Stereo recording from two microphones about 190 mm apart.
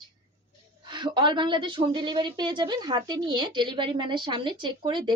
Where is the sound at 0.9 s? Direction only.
25° right (ahead or behind).